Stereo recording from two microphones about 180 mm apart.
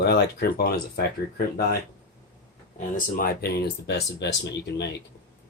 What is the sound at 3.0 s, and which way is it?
Speech, 50° left (ahead or behind).